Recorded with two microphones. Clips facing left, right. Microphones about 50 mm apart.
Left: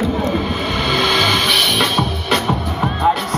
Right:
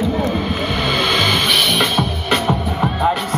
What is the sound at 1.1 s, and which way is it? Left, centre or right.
Music, centre.